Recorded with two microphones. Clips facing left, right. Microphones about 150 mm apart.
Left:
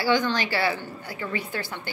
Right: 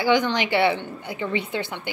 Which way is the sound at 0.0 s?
20° right (ahead or behind).